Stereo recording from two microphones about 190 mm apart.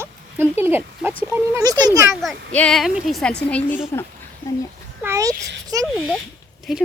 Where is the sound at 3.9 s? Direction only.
15° left (ahead or behind).